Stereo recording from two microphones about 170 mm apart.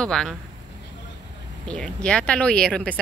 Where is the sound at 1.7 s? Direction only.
5° left (ahead or behind).